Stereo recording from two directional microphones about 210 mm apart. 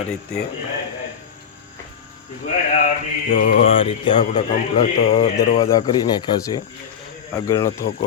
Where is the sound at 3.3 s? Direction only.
35° left (ahead or behind).